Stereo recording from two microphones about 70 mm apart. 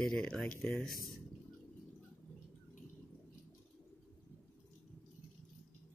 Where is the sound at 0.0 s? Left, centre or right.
Centre.